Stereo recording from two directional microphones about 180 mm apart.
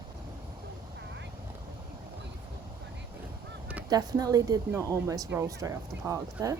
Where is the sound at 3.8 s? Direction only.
20° right (ahead or behind).